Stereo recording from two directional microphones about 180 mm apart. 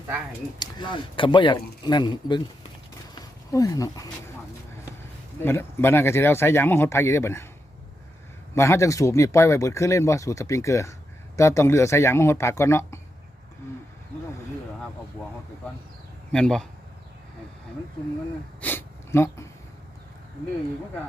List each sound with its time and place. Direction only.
0.6 s speech: 25° left (ahead or behind)
5.4 s speech: 10° left (ahead or behind)
8.5 s speech: 15° left (ahead or behind)
16.3 s speech: 5° left (ahead or behind)
18.6 s a sound: 10° left (ahead or behind)